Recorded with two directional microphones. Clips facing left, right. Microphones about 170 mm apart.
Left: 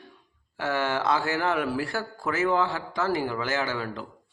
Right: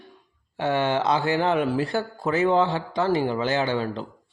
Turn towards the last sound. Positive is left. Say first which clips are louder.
# right 5 dB
turn(degrees=-25)  # may be behind; listen again after turning